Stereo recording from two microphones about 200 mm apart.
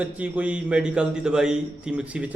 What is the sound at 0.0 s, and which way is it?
A man's voice, 5° right (ahead or behind).